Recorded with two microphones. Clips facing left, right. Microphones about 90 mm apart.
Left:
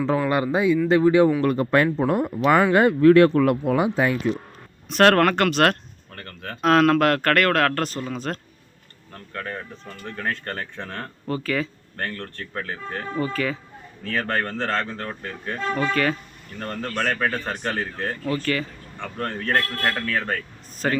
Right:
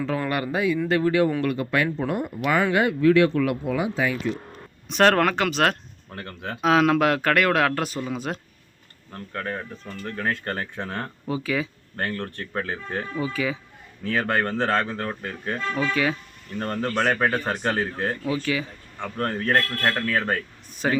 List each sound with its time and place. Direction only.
0.3 s speech: 25° left (ahead or behind)
1.4 s speech: 40° left (ahead or behind)
4.9 s speech: 5° right (ahead or behind)
6.1 s speech: 15° right (ahead or behind)
6.6 s speech: 5° right (ahead or behind)